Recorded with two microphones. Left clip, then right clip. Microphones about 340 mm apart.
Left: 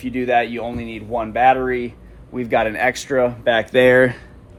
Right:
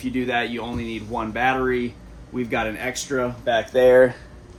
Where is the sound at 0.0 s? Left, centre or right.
Centre.